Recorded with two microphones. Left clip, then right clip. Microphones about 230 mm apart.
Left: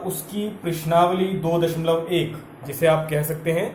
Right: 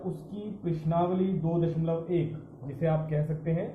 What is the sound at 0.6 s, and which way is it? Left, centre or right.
A man's voice, left.